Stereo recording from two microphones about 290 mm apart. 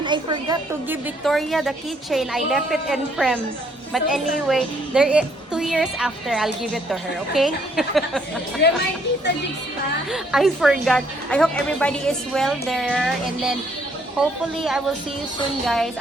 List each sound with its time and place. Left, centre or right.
0.0 s a woman's voice: centre
1.2 s a woman's voice: centre
8.6 s speech: left
10.1 s a woman's voice: centre